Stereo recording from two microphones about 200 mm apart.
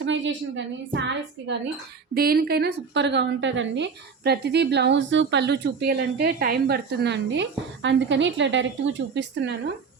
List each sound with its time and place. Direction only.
0.0 s a woman's voice: 65° right (ahead or behind)
2.1 s a woman's voice: 50° right (ahead or behind)